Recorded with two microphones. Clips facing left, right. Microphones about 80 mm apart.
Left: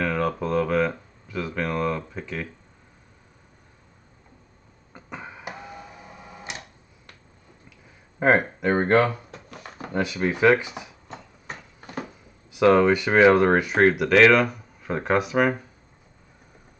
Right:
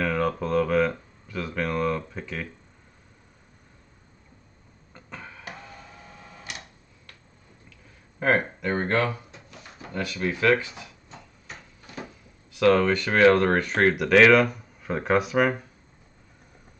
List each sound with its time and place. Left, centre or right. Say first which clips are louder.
0.0 s a sound: left 1 dB; centre
4.9 s tick-tock: left 4 dB; centre
8.2 s speech: left 4 dB; left
9.3 s a sound: left 5 dB; left
9.9 s speech: left 4 dB; centre
11.1 s tick-tock: left 5 dB; left
12.5 s speech: left 3 dB; centre